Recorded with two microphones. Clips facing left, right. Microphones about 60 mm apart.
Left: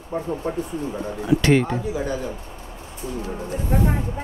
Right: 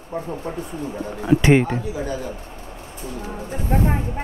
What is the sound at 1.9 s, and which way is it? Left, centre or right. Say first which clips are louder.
Speech: left 1 dB; left.